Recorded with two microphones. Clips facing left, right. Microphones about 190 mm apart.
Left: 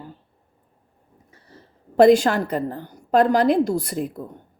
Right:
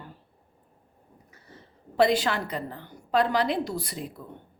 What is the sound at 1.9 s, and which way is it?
A woman's voice, 45° left (ahead or behind).